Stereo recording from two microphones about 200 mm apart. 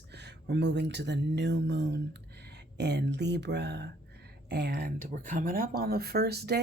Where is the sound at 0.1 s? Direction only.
60° right (ahead or behind).